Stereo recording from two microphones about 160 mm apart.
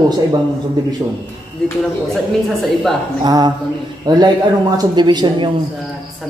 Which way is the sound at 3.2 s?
25° right (ahead or behind).